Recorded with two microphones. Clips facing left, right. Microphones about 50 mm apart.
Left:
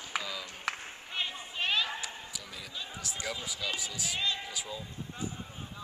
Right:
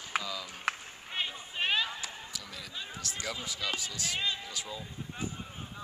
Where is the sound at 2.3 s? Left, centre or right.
Centre.